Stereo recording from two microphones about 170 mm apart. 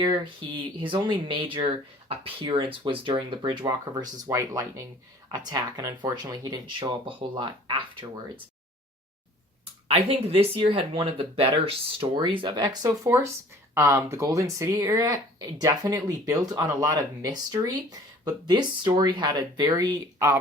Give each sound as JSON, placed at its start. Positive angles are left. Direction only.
{"t": 0.0, "sound": "speech", "side_deg": -30}
{"t": 9.9, "sound": "speech", "side_deg": -35}
{"t": 18.9, "sound": "speech", "side_deg": -30}